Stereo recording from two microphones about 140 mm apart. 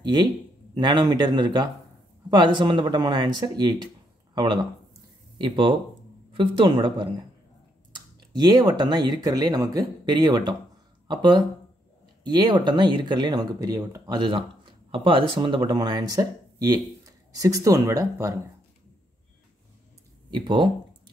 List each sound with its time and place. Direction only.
0.0 s speech: 30° right (ahead or behind)
8.4 s speech: 30° right (ahead or behind)
20.2 s speech: 30° right (ahead or behind)